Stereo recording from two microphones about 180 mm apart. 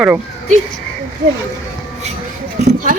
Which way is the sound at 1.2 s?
50° right (ahead or behind).